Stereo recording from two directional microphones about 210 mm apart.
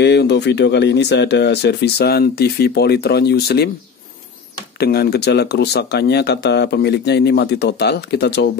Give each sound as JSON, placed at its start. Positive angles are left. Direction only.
{"t": 0.0, "sound": "speech", "side_deg": 55}
{"t": 4.7, "sound": "speech", "side_deg": 50}